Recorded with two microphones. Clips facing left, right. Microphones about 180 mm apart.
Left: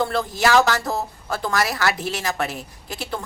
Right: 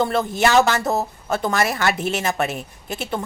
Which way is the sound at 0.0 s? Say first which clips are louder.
Right 2 dB; 25° right (ahead or behind).